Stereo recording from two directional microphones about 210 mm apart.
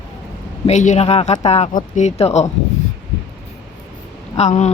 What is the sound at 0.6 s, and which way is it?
Speech, 35° left (ahead or behind).